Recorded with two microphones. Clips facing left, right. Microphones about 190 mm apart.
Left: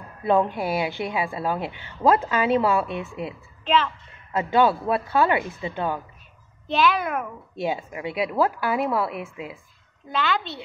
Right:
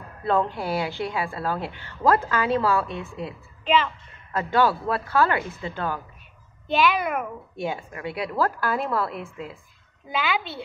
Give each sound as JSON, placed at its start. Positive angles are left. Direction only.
{"t": 0.2, "sound": "a woman's voice", "side_deg": 15}
{"t": 3.6, "sound": "a woman's voice", "side_deg": 0}
{"t": 4.3, "sound": "a woman's voice", "side_deg": 20}
{"t": 6.7, "sound": "a woman's voice", "side_deg": 0}
{"t": 7.6, "sound": "a woman's voice", "side_deg": 20}
{"t": 8.7, "sound": "a woman's voice", "side_deg": 5}
{"t": 10.1, "sound": "a woman's voice", "side_deg": -5}